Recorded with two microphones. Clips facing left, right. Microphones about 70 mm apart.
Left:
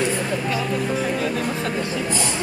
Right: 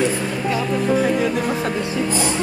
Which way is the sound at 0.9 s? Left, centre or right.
Centre.